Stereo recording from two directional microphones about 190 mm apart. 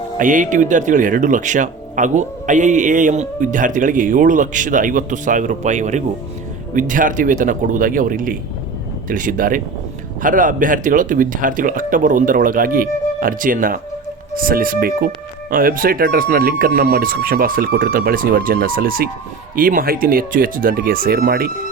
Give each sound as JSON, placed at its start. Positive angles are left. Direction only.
{"t": 0.2, "sound": "speech", "side_deg": -45}